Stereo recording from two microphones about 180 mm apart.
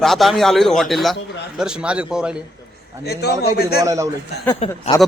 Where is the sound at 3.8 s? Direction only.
20° right (ahead or behind).